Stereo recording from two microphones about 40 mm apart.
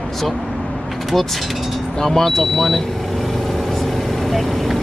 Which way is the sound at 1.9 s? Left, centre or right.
Centre.